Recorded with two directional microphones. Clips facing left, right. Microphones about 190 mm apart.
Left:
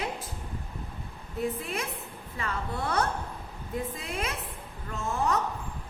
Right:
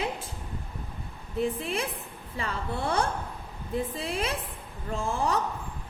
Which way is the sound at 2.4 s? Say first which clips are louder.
Right 1 dB; 30° right (ahead or behind).